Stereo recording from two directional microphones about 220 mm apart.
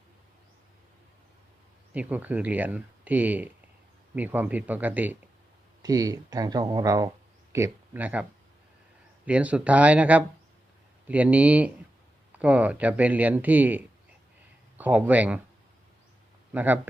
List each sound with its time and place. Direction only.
1.9 s speech: 5° right (ahead or behind)
16.5 s speech: 5° right (ahead or behind)